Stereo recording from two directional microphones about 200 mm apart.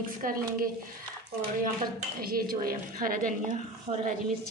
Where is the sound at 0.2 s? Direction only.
45° right (ahead or behind).